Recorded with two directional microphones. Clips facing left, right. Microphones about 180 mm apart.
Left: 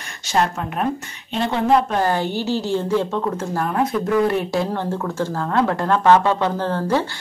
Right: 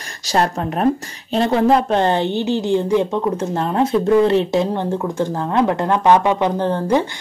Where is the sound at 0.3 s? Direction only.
35° right (ahead or behind).